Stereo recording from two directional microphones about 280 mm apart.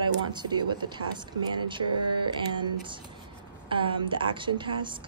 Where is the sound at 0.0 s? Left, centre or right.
Centre.